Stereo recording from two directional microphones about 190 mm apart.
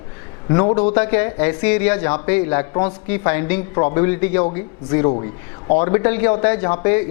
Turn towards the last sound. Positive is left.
turn(degrees=15)  # may be behind; listen again after turning